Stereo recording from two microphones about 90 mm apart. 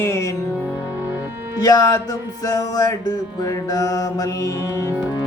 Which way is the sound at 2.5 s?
45° left (ahead or behind).